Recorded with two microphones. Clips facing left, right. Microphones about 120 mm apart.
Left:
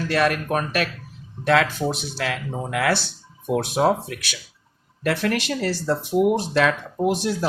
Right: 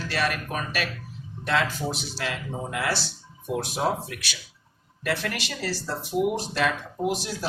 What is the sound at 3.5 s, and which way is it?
Speech, 65° left (ahead or behind).